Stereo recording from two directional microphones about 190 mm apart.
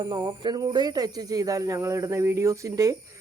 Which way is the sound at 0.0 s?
20° right (ahead or behind).